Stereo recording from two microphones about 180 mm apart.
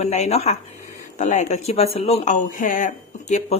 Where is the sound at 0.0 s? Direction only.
40° left (ahead or behind).